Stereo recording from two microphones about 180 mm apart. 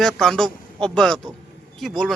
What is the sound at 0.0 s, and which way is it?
A man's voice, 5° left (ahead or behind).